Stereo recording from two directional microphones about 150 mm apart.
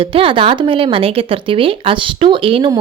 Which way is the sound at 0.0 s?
35° right (ahead or behind).